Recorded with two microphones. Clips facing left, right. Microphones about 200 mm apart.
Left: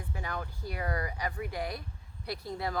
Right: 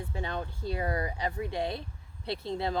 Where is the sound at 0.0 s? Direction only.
25° right (ahead or behind).